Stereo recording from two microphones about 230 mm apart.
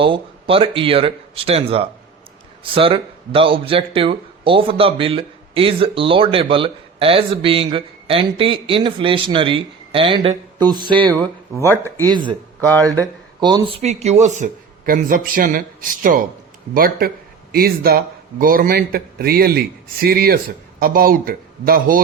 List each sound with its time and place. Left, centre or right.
0.0 s speech: right
12.0 s speech: centre
13.4 s speech: centre; by 22.0 s right